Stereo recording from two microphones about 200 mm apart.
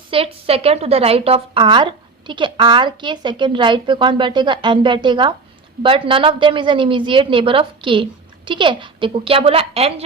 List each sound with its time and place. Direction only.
0.1 s speech: 30° right (ahead or behind)